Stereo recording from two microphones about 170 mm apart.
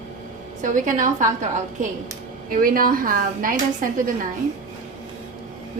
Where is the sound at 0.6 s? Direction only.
50° right (ahead or behind).